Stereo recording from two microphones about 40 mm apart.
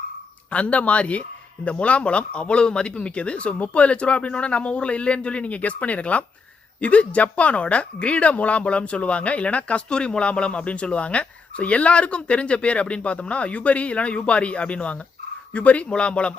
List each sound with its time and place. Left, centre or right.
0.5 s speech: left
9.9 s speech: left